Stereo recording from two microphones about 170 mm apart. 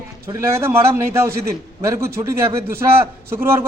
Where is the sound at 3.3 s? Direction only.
15° right (ahead or behind).